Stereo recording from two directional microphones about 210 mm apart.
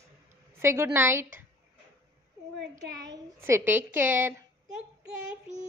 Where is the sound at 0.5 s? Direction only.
10° right (ahead or behind).